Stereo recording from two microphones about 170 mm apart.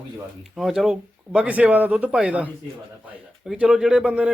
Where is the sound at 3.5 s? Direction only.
5° right (ahead or behind).